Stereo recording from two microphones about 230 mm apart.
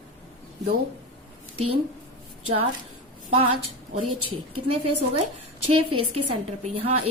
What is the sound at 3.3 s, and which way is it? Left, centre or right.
A woman's voice, right.